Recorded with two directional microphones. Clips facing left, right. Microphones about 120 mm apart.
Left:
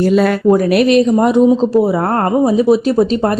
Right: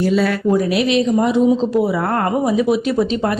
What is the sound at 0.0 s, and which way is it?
Speech, 50° left (ahead or behind).